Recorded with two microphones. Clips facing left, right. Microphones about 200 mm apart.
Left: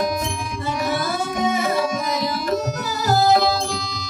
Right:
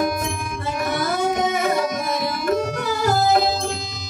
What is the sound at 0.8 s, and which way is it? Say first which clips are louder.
Music: right 4 dB; 55° right (ahead or behind).